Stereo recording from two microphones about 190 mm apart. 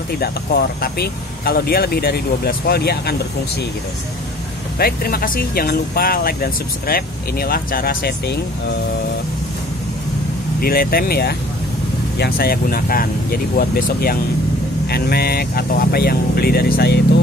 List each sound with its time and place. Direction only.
0.2 s speech: 50° left (ahead or behind)
4.7 s speech: 55° left (ahead or behind)
10.6 s speech: 50° left (ahead or behind)